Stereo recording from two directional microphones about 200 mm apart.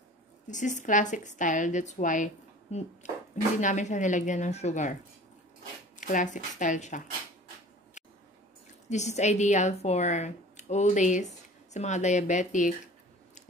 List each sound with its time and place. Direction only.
0.5 s speech: 40° left (ahead or behind)
5.9 s speech: 40° left (ahead or behind)
8.8 s speech: 35° left (ahead or behind)